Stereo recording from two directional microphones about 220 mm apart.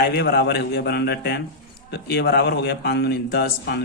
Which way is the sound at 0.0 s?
45° left (ahead or behind).